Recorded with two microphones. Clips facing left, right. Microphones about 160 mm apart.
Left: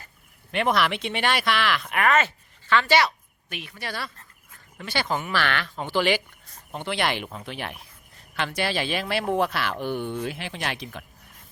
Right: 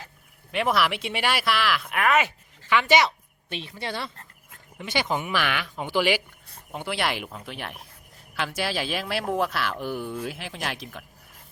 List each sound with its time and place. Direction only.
0.5 s speech: 5° right (ahead or behind)
2.6 s a woman's voice: 15° right (ahead or behind)